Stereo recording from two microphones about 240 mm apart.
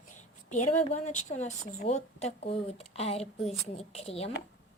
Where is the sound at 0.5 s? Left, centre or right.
Left.